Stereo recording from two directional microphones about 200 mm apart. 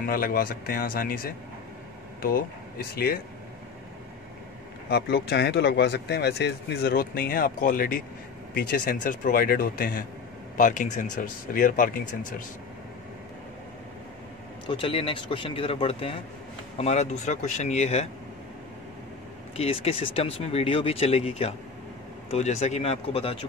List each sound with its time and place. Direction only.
0.0 s speech: 45° left (ahead or behind)
4.8 s speech: 55° left (ahead or behind)
14.7 s speech: 25° left (ahead or behind)
19.5 s speech: 30° left (ahead or behind)